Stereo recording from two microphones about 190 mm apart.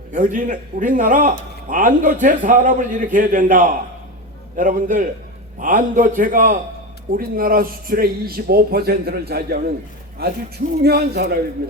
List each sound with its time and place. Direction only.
0.1 s a man's voice: 45° right (ahead or behind)